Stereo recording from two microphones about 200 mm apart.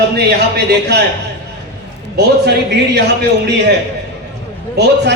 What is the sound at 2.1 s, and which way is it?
Speech, 55° right (ahead or behind).